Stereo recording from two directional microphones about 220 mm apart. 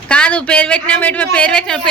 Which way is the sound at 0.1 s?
5° left (ahead or behind).